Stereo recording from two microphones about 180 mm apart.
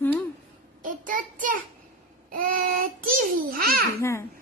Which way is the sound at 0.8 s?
50° right (ahead or behind).